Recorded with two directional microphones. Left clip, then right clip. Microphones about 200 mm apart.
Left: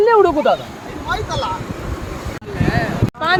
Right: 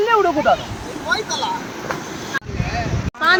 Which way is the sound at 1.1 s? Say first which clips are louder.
Right 1 dB; 20° right (ahead or behind).